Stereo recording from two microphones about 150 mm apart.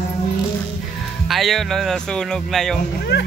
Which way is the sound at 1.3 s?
Centre (ahead or behind).